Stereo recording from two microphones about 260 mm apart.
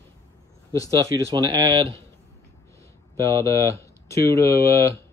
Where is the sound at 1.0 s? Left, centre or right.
Centre.